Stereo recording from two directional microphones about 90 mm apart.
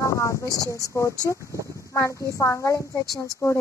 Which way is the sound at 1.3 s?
35° right (ahead or behind).